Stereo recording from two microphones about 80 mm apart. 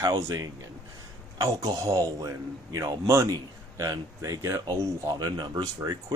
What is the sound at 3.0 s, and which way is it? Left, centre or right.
Speech, right.